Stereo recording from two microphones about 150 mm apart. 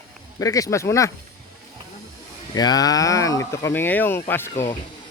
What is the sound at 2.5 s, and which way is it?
Speech, 25° left (ahead or behind).